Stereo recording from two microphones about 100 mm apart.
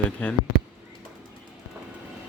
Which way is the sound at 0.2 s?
15° left (ahead or behind).